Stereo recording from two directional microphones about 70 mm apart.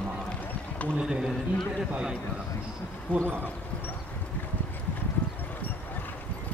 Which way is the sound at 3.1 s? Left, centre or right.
Left.